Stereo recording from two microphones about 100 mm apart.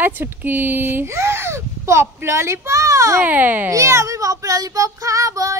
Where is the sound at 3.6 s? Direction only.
30° right (ahead or behind).